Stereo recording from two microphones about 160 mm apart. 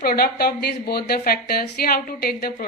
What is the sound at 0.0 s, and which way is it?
Speech, 70° left (ahead or behind).